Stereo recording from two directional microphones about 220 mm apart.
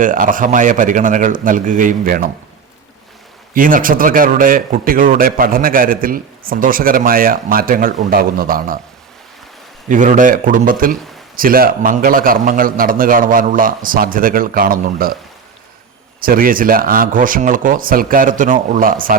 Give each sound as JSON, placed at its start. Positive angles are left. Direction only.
{"t": 0.0, "sound": "speech", "side_deg": -35}
{"t": 3.5, "sound": "speech", "side_deg": -40}
{"t": 9.9, "sound": "speech", "side_deg": -35}
{"t": 16.2, "sound": "speech", "side_deg": -40}